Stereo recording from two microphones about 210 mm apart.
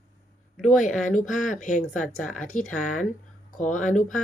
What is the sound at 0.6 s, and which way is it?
Speech, 35° left (ahead or behind).